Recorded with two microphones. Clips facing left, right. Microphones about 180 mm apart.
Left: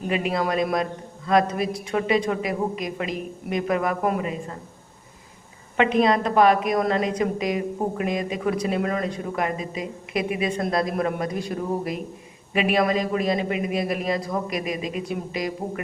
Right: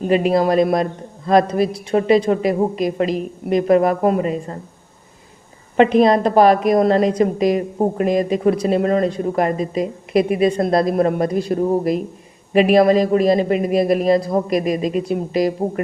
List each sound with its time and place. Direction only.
0.0 s a woman's voice: 35° right (ahead or behind)
5.7 s a woman's voice: 35° right (ahead or behind)